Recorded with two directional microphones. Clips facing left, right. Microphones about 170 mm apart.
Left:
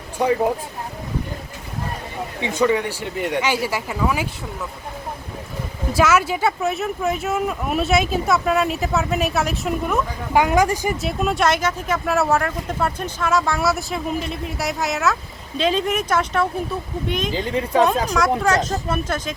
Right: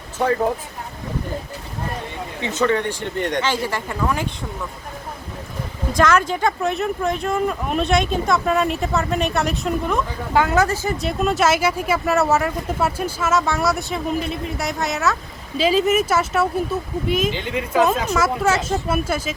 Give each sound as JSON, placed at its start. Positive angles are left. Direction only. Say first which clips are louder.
{"t": 0.2, "sound": "speech", "louder": "left 1 dB", "side_deg": 15}
{"t": 2.4, "sound": "speech", "louder": "left 1 dB", "side_deg": 10}
{"t": 5.9, "sound": "speech", "louder": "even", "side_deg": 5}
{"t": 10.9, "sound": "speech", "louder": "right 1 dB", "side_deg": 0}
{"t": 17.3, "sound": "a woman's voice", "louder": "left 1 dB", "side_deg": 35}
{"t": 18.1, "sound": "speech", "louder": "even", "side_deg": -5}